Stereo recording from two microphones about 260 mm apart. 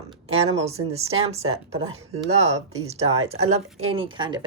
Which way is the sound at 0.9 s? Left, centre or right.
Right.